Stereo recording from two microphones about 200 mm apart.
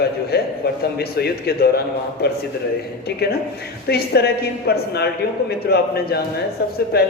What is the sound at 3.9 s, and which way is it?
A man's voice, 55° left (ahead or behind).